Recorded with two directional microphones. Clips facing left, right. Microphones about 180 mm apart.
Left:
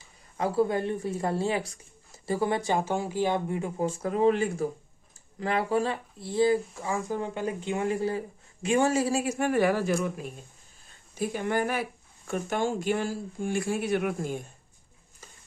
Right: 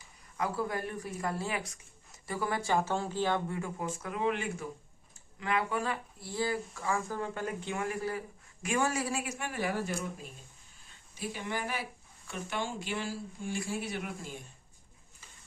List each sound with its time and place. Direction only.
0.3 s speech: 30° left (ahead or behind)
3.8 s speech: 30° left (ahead or behind)
9.5 s speech: 70° left (ahead or behind); by 10.2 s 90° left
11.2 s speech: 50° left (ahead or behind)